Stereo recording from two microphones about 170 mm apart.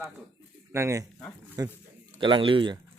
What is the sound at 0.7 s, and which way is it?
Speech, 15° right (ahead or behind).